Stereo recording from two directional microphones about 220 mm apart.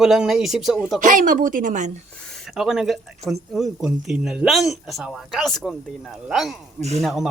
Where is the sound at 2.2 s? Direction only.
Centre (ahead or behind).